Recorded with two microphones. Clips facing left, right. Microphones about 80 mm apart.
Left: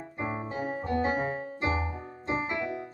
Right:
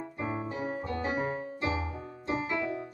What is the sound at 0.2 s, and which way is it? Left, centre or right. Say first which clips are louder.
Piano: left 1 dB; left.